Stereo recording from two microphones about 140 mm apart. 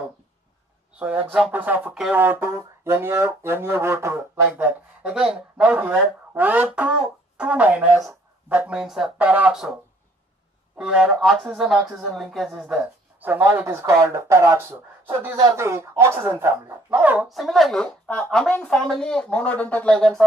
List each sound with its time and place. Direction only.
0.9 s speech: 10° right (ahead or behind)
10.8 s speech: 5° right (ahead or behind)
17.3 s speech: centre (ahead or behind)